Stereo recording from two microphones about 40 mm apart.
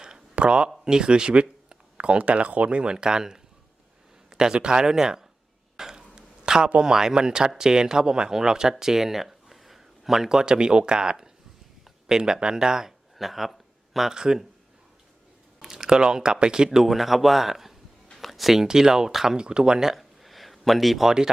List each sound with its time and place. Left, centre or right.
0.3 s speech: right
5.7 s throat clearing: centre
6.7 s speech: centre
13.1 s a sound: centre
14.1 s speech: centre
15.6 s speech: centre
16.6 s speech: centre
18.2 s a sound: centre
18.6 s speech: centre
19.9 s a sound: centre